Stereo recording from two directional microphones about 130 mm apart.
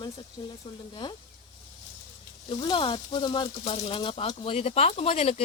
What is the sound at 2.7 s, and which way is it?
Speech, 40° left (ahead or behind).